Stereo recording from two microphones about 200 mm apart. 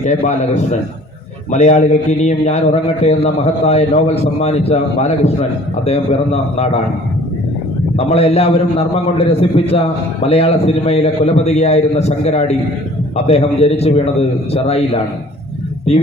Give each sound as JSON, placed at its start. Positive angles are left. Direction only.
{"t": 0.0, "sound": "a man's voice", "side_deg": 35}
{"t": 7.9, "sound": "a man's voice", "side_deg": 30}
{"t": 15.9, "sound": "a man's voice", "side_deg": 30}